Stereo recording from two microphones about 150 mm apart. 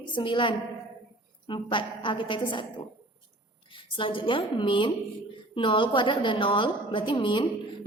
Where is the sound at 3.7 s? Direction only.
35° left (ahead or behind).